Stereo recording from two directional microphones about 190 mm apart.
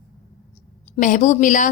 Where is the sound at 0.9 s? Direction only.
40° left (ahead or behind).